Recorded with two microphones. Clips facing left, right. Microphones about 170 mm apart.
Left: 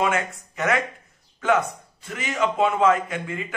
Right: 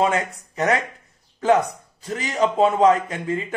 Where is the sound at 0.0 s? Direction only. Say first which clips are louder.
Right 3 dB; 35° right (ahead or behind).